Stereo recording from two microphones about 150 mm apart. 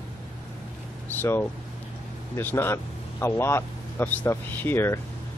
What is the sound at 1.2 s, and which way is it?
Speech, 15° left (ahead or behind).